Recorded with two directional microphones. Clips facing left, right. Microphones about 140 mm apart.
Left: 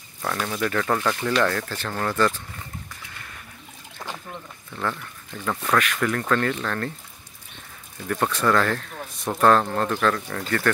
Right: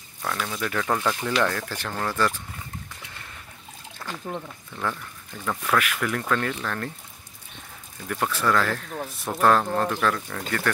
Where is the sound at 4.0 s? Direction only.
20° left (ahead or behind).